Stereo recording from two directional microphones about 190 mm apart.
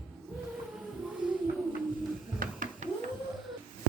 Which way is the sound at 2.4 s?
45° right (ahead or behind).